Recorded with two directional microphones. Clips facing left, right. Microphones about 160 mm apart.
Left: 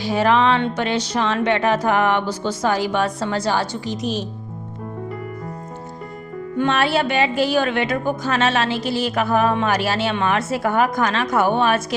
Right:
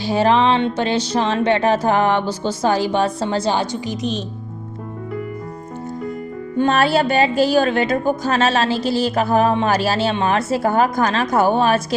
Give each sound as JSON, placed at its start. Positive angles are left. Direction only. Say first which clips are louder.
{"t": 0.0, "sound": "speech", "louder": "right 2 dB", "side_deg": -30}
{"t": 4.0, "sound": "speech", "louder": "even", "side_deg": 10}
{"t": 6.6, "sound": "speech", "louder": "right 3 dB", "side_deg": -40}